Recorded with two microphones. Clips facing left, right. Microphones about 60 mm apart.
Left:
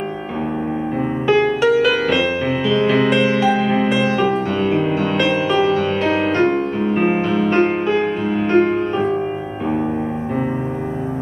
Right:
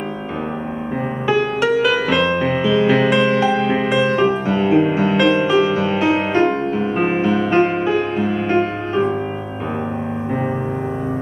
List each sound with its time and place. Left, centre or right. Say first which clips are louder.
1.2 s music: left 3 dB; centre